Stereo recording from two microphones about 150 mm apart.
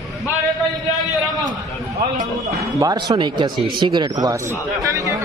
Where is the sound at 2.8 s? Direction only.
25° right (ahead or behind).